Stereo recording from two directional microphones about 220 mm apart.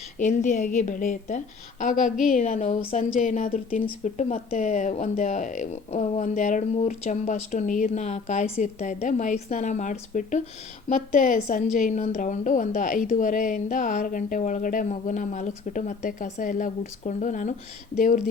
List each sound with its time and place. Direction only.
0.2 s speech: 35° left (ahead or behind)